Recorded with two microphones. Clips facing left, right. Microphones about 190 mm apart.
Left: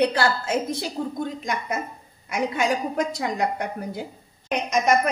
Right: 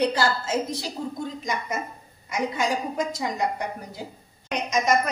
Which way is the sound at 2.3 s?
65° left (ahead or behind).